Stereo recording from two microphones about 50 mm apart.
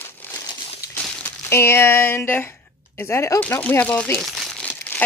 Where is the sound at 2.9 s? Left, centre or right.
Left.